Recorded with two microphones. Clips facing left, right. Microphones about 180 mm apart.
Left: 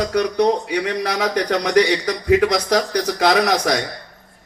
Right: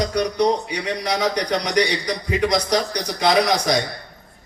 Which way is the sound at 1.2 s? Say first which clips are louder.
Left 4 dB; 70° left (ahead or behind).